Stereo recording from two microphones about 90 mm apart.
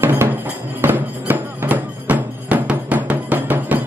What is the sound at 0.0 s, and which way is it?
Music, 20° right (ahead or behind).